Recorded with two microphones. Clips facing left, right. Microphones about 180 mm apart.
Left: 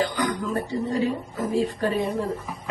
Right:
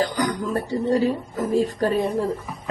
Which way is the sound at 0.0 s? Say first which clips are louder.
Right 2 dB; 40° right (ahead or behind).